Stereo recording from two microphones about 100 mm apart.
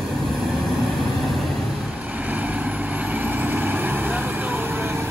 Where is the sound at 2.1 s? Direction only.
15° right (ahead or behind).